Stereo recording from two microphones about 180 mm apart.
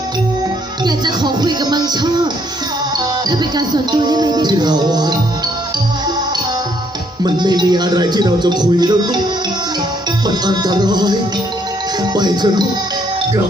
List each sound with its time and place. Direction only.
0.9 s speech: 25° right (ahead or behind)
7.3 s speech: 25° right (ahead or behind)
10.2 s speech: 25° right (ahead or behind)